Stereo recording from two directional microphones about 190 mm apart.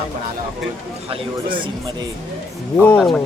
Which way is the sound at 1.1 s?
30° right (ahead or behind).